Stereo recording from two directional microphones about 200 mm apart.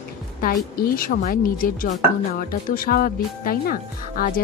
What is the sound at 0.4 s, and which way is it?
Speech, 45° left (ahead or behind).